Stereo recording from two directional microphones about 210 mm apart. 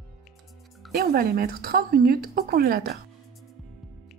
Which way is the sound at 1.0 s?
45° right (ahead or behind).